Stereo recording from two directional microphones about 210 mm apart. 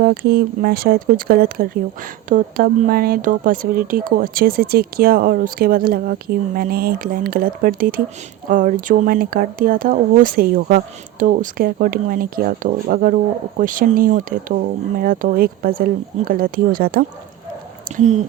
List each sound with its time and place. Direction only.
0.0 s speech: 45° right (ahead or behind)
17.9 s speech: 35° right (ahead or behind)